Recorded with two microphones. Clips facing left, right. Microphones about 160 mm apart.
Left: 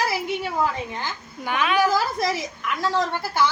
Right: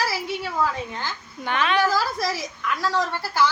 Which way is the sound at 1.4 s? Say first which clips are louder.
Left 1 dB; 5° left (ahead or behind).